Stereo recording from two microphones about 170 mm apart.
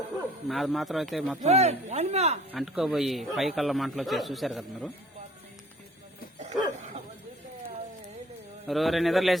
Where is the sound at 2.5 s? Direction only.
Centre (ahead or behind).